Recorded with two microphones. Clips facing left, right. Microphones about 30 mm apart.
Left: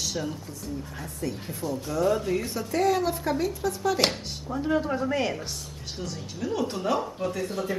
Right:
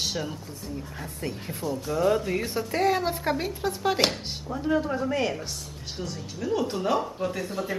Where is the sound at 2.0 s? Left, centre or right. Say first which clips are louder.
Even; centre; by 4.0 s right.